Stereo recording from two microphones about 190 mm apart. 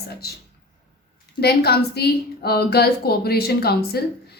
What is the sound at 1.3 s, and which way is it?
A woman's voice, 55° left (ahead or behind).